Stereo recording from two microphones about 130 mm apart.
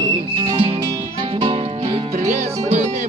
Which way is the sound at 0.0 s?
45° right (ahead or behind).